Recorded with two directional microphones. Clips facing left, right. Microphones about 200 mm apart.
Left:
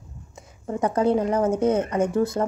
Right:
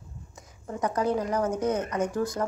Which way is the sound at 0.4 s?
30° left (ahead or behind).